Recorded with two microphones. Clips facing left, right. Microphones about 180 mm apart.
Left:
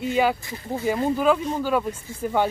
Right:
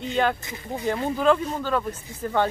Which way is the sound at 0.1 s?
5° left (ahead or behind).